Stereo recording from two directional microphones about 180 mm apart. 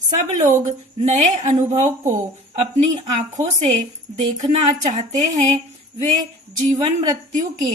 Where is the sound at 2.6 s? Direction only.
35° right (ahead or behind).